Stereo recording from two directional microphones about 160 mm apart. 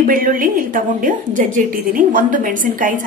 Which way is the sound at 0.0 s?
60° right (ahead or behind).